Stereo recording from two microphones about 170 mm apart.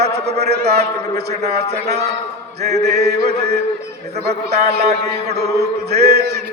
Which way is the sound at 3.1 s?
75° right (ahead or behind).